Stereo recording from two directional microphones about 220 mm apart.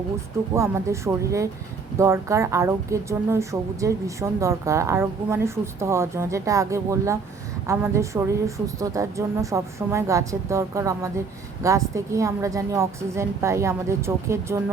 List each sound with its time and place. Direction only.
0.5 s a woman's voice: 15° right (ahead or behind)